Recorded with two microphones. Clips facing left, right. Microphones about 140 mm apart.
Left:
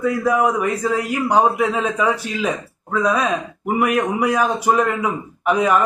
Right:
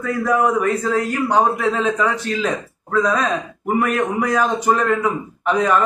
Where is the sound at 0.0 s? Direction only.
10° left (ahead or behind).